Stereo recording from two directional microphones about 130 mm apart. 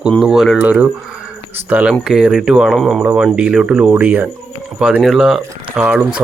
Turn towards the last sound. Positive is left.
turn(degrees=-10)  # may be behind; listen again after turning